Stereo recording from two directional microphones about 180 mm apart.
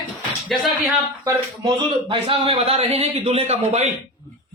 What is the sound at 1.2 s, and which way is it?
A man's voice, 25° right (ahead or behind).